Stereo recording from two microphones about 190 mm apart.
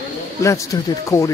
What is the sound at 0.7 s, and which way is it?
Speech, 20° left (ahead or behind).